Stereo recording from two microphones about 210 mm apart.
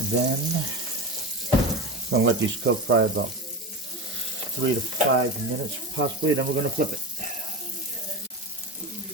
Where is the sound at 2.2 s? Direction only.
60° right (ahead or behind).